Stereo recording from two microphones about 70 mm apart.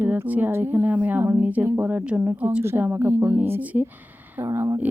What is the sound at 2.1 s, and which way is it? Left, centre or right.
Speech, centre.